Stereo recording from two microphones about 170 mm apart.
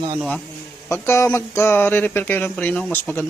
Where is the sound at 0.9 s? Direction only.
15° left (ahead or behind).